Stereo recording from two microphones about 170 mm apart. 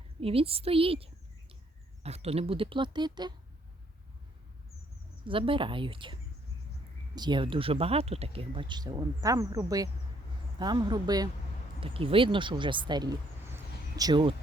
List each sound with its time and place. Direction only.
0.2 s speech: 35° right (ahead or behind)
5.2 s speech: 30° right (ahead or behind)
7.2 s speech: 25° right (ahead or behind)
13.5 s a sound: 20° right (ahead or behind)